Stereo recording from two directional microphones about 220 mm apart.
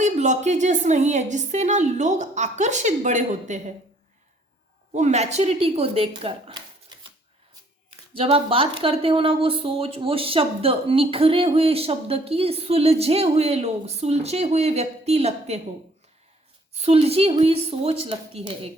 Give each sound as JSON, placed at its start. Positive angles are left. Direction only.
{"t": 0.0, "sound": "a woman's voice", "side_deg": -30}
{"t": 4.9, "sound": "speech", "side_deg": -30}
{"t": 8.1, "sound": "speech", "side_deg": -25}
{"t": 16.8, "sound": "speech", "side_deg": -30}